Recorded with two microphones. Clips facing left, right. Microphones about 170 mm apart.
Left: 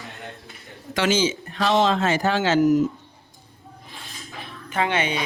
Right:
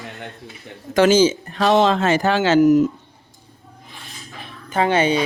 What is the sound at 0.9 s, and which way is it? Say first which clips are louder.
Speech: right 8 dB; 45° right (ahead or behind).